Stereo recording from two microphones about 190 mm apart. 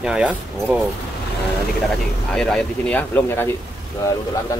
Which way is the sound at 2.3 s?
5° left (ahead or behind).